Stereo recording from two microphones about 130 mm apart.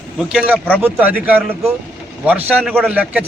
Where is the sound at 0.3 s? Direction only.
10° right (ahead or behind).